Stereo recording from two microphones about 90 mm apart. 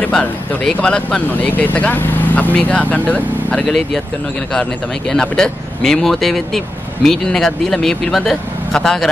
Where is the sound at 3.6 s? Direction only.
Centre (ahead or behind).